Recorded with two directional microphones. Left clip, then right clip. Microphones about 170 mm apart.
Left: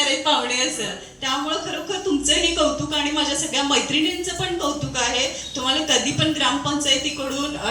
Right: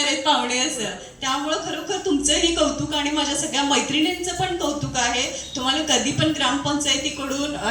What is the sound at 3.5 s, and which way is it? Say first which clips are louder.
Speech: even; 35° right (ahead or behind).